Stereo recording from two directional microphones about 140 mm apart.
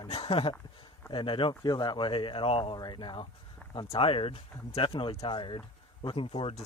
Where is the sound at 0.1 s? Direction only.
45° left (ahead or behind).